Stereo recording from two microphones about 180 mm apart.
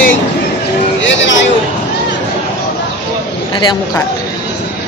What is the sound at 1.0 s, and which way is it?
Speech, 90° left.